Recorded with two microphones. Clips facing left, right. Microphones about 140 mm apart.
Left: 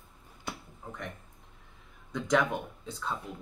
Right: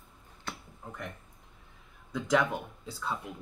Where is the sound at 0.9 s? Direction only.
Centre (ahead or behind).